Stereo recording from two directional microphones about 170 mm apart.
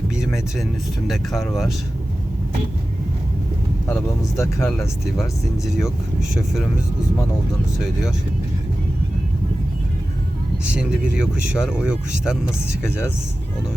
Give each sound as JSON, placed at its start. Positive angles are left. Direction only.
{"t": 0.2, "sound": "speech", "side_deg": -5}
{"t": 3.8, "sound": "speech", "side_deg": 15}
{"t": 10.7, "sound": "speech", "side_deg": -5}